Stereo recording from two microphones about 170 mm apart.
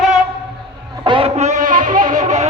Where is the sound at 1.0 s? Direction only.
30° right (ahead or behind).